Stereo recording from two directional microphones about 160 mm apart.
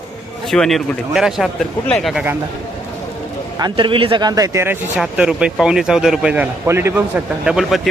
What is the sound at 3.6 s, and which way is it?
A man's voice, 25° right (ahead or behind).